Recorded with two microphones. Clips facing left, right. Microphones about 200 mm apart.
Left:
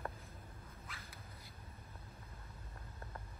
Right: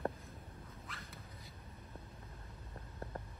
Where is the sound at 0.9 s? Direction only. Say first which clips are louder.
Right 2 dB; centre (ahead or behind).